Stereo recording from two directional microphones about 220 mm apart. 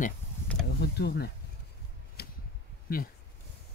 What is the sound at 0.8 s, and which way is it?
Speech, 50° left (ahead or behind).